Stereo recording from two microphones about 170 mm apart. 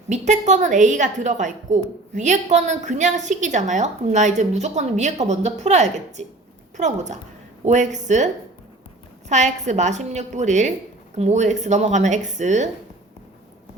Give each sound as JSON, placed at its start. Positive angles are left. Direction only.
{"t": 0.1, "sound": "a woman's voice", "side_deg": -45}
{"t": 9.3, "sound": "a woman's voice", "side_deg": -45}